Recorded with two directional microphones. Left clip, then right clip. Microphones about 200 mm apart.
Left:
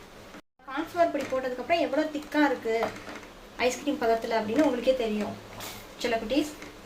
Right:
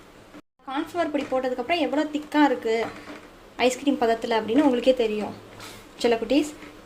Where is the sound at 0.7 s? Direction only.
45° right (ahead or behind).